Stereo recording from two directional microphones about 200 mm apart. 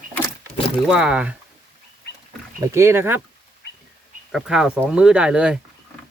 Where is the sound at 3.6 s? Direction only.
55° left (ahead or behind).